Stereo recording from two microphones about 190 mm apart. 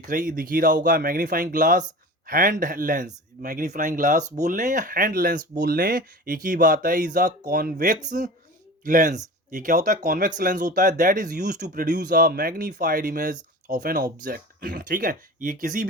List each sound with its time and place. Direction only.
0.1 s speech: 45° right (ahead or behind)